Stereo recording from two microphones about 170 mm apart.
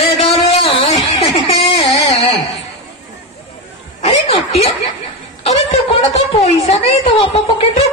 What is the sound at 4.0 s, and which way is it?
Snicker, 35° left (ahead or behind).